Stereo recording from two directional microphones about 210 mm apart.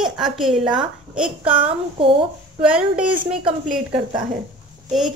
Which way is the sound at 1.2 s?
25° right (ahead or behind).